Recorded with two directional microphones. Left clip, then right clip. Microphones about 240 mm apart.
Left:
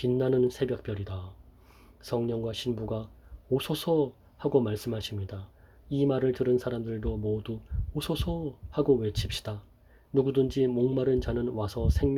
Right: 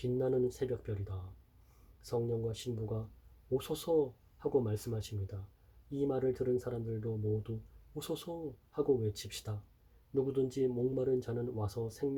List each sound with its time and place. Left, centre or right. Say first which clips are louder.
0.0 s speech: left 7 dB; left